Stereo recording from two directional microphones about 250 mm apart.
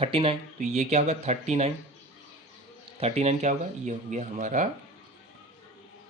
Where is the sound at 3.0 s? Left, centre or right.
Right.